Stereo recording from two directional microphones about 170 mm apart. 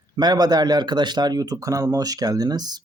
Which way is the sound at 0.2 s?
25° right (ahead or behind).